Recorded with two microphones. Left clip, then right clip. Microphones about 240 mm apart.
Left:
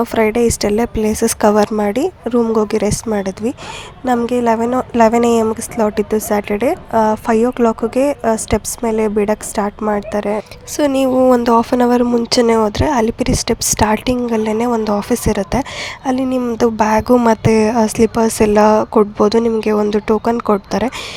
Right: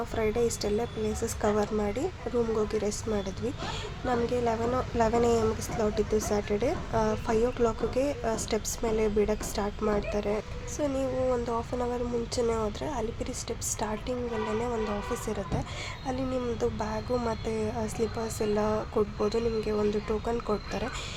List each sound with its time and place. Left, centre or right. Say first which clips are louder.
0.0 s a woman's voice: left 14 dB; left